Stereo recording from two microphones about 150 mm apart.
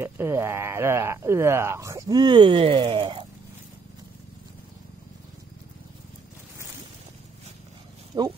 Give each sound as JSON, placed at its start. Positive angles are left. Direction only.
{"t": 0.0, "sound": "speech", "side_deg": -15}
{"t": 8.1, "sound": "speech", "side_deg": -25}